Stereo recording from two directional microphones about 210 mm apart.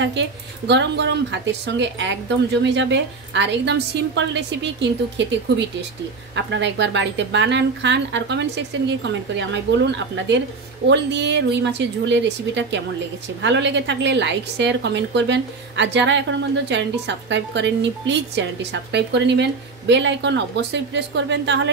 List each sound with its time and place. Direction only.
0.0 s speech: 55° right (ahead or behind)